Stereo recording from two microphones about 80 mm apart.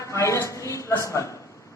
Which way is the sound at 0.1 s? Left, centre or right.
Left.